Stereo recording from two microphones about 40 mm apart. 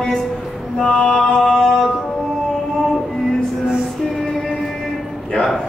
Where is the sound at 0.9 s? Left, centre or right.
Left.